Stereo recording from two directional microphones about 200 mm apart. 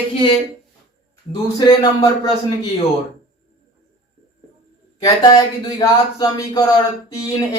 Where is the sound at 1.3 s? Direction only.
20° left (ahead or behind).